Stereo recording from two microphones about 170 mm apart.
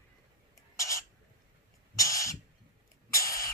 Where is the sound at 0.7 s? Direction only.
20° left (ahead or behind).